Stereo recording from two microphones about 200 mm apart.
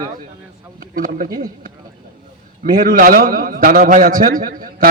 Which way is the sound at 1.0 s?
40° right (ahead or behind).